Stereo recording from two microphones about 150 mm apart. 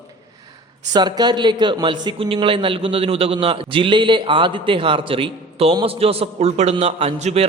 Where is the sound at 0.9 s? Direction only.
30° right (ahead or behind).